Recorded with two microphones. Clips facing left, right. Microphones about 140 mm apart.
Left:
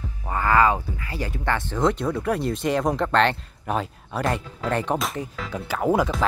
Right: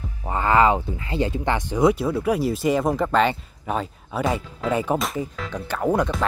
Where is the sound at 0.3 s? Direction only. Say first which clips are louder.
Right 2 dB; 20° right (ahead or behind).